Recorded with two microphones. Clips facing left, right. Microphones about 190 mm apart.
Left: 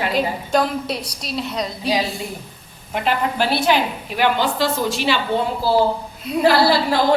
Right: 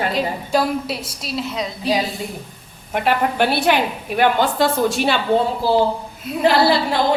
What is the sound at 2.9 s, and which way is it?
A woman's voice, 55° right (ahead or behind).